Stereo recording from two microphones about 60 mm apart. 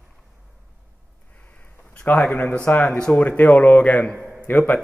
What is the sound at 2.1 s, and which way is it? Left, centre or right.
A man's voice, left.